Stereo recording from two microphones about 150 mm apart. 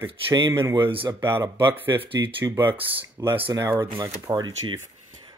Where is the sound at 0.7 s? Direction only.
30° right (ahead or behind).